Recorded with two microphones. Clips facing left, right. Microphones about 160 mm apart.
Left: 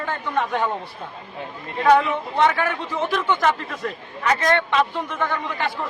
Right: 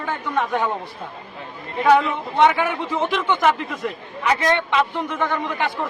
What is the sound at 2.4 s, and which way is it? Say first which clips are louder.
A man's voice: right 3 dB; 15° right (ahead or behind).